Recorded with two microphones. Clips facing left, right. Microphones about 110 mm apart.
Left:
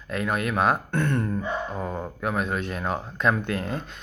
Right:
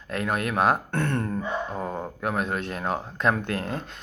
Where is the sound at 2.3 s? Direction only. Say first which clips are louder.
Left 1 dB; 25° right (ahead or behind).